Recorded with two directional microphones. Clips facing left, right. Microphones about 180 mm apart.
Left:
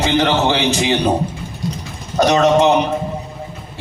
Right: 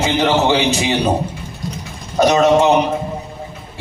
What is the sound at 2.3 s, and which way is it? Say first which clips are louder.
Mantra: right 1 dB; 15° right (ahead or behind).